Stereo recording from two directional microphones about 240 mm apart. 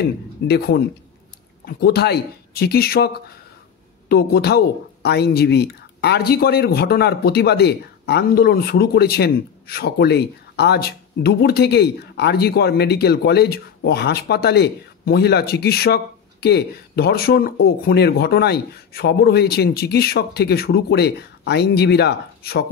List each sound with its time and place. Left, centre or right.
0.0 s a woman's voice: left
4.1 s a woman's voice: left